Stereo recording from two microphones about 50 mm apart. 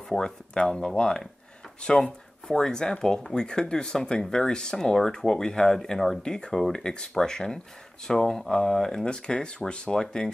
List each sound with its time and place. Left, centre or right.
0.1 s speech: centre